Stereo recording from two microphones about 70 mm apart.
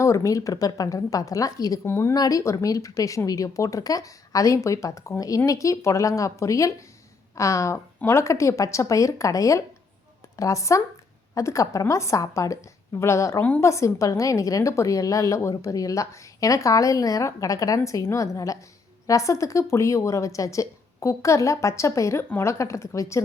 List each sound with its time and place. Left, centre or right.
0.0 s a woman's voice: left
1.8 s speech: left
2.1 s speech: left
2.4 s a woman's voice: left